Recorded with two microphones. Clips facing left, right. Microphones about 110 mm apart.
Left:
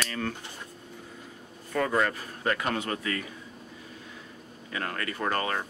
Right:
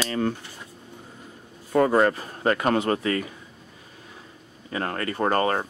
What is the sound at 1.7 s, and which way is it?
Speech, 30° right (ahead or behind).